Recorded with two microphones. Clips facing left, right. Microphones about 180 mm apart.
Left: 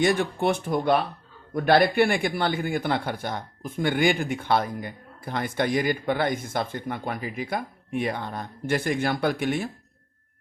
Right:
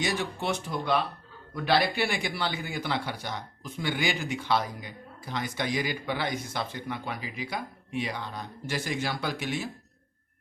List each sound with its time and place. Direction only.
0.0 s speech: 55° left (ahead or behind)